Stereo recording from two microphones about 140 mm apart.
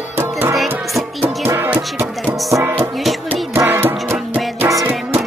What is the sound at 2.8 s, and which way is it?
Music, centre (ahead or behind).